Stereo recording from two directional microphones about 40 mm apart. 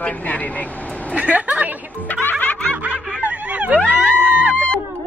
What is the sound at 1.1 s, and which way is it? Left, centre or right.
Speech, right.